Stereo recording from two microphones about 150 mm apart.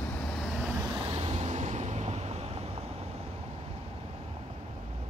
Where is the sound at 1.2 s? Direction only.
45° right (ahead or behind).